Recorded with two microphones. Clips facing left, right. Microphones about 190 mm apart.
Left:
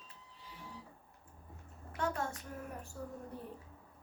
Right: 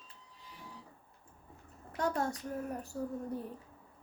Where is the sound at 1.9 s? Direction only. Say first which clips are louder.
Right 4 dB; 40° right (ahead or behind).